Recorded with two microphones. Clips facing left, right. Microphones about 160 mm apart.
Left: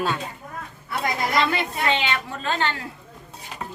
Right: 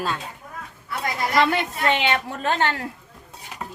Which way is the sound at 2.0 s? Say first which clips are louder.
Right 3 dB; 55° right (ahead or behind).